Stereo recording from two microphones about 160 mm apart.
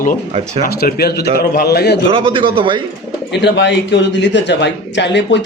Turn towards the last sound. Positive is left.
turn(degrees=90)